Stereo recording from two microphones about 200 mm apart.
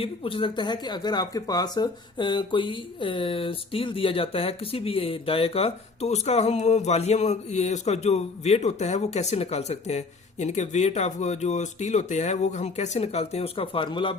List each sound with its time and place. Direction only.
0.0 s speech: 25° left (ahead or behind)